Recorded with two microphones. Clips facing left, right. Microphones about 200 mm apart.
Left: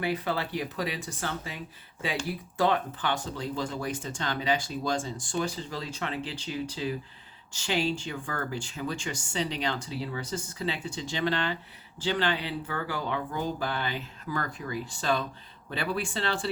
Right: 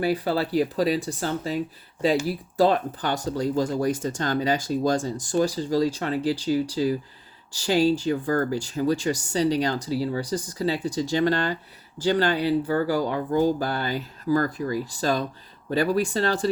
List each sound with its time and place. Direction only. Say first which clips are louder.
0.0 s speech: right 6 dB; 35° right (ahead or behind)